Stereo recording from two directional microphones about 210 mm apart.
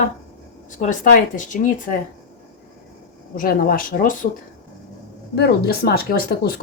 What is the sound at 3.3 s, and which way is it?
Speech, 40° left (ahead or behind).